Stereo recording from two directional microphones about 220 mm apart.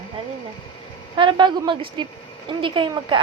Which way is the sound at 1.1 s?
20° right (ahead or behind).